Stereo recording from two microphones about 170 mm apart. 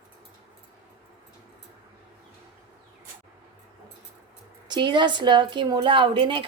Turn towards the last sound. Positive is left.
turn(degrees=-30)  # may be behind; listen again after turning